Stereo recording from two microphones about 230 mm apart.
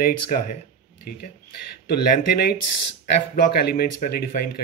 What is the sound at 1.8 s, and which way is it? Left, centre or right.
Speech, left.